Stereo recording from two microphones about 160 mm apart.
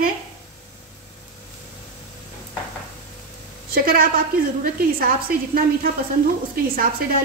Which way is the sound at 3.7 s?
70° right (ahead or behind).